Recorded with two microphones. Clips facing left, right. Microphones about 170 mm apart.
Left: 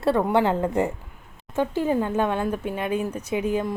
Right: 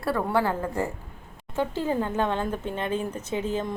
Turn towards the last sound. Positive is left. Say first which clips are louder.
# left 4 dB
turn(degrees=10)  # may be behind; listen again after turning